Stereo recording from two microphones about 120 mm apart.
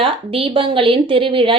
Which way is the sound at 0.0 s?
50° right (ahead or behind).